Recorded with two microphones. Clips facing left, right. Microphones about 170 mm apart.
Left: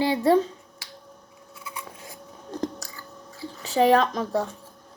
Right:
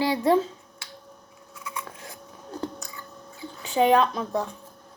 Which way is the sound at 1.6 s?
30° left (ahead or behind).